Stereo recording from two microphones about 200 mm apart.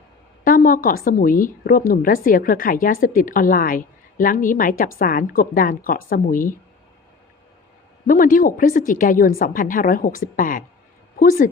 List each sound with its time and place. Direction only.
0.4 s a woman's voice: 45° left (ahead or behind)
8.0 s a woman's voice: 45° left (ahead or behind)